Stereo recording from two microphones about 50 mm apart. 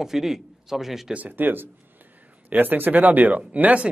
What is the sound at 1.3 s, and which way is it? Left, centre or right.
Speech, right.